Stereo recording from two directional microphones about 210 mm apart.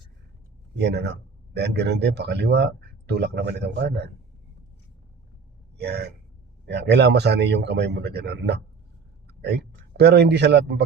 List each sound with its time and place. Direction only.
0.8 s a man's voice: 55° right (ahead or behind)
5.7 s a man's voice: 50° right (ahead or behind)